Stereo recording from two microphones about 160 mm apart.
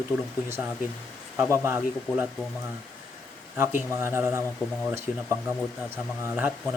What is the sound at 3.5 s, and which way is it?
Speech, 15° right (ahead or behind).